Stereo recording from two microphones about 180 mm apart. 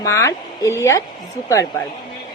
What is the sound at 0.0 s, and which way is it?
Speech, 20° left (ahead or behind).